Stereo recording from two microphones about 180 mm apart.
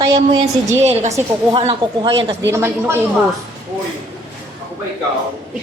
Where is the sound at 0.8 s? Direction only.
40° right (ahead or behind).